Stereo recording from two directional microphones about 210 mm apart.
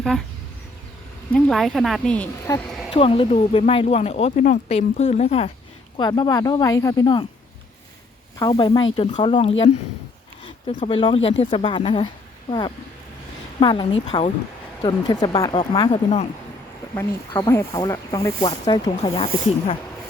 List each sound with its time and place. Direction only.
0.0 s speech: centre (ahead or behind)
1.3 s a woman's voice: centre (ahead or behind)
2.9 s speech: 25° left (ahead or behind)
6.0 s speech: 20° left (ahead or behind)
8.4 s speech: 20° left (ahead or behind)